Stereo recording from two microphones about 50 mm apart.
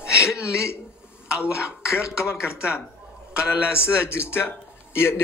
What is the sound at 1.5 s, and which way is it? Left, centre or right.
Speech, left.